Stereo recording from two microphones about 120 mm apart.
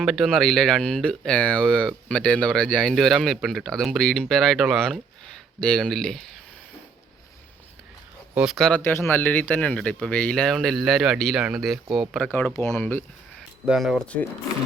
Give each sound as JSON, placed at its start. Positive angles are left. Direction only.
{"t": 0.0, "sound": "speech", "side_deg": 0}
{"t": 8.4, "sound": "speech", "side_deg": 0}
{"t": 8.7, "sound": "speech", "side_deg": 20}
{"t": 12.3, "sound": "speech", "side_deg": 15}
{"t": 13.7, "sound": "speech", "side_deg": 0}